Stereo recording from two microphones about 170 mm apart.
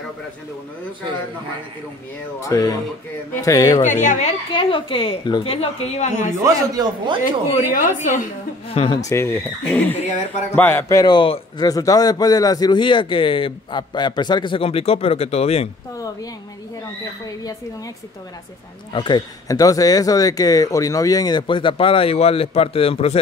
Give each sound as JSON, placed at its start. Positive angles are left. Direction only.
{"t": 2.4, "sound": "a man's voice", "side_deg": 20}
{"t": 3.8, "sound": "a woman's voice", "side_deg": 45}
{"t": 4.5, "sound": "a woman's voice", "side_deg": 30}
{"t": 6.4, "sound": "a man's voice", "side_deg": -20}
{"t": 7.5, "sound": "a woman's voice", "side_deg": 50}
{"t": 8.7, "sound": "a woman's voice", "side_deg": 30}
{"t": 9.0, "sound": "a man's voice", "side_deg": 15}
{"t": 18.9, "sound": "a man's voice", "side_deg": 25}